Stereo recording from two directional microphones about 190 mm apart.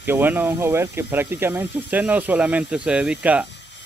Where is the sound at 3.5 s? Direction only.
65° left (ahead or behind).